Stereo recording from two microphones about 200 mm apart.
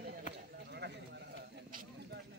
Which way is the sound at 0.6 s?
55° right (ahead or behind).